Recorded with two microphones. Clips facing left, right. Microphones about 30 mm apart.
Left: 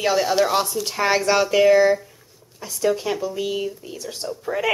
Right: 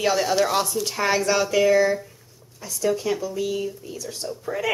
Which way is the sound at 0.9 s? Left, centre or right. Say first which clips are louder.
Left 2 dB; centre.